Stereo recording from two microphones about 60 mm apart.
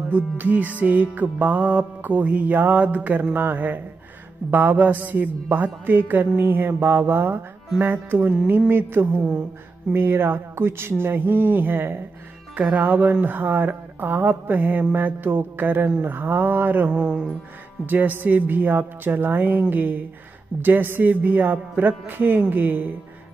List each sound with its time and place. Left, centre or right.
0.1 s music: right
4.5 s speech: right
9.9 s speech: right
17.8 s speech: right